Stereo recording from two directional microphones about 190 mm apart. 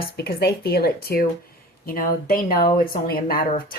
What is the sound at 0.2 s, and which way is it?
A woman's voice, 55° left (ahead or behind).